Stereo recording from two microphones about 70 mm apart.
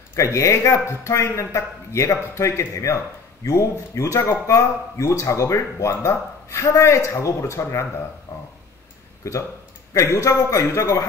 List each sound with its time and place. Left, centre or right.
0.1 s speech: left
8.3 s speech: left
9.2 s speech: left